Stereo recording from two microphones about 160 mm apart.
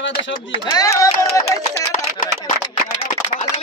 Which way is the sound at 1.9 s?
55° left (ahead or behind).